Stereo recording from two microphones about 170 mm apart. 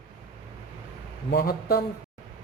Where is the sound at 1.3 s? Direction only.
65° left (ahead or behind).